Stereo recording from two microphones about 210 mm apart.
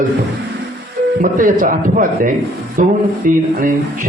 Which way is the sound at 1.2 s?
40° right (ahead or behind).